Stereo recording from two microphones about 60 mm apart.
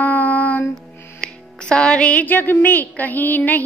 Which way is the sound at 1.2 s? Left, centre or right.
Centre.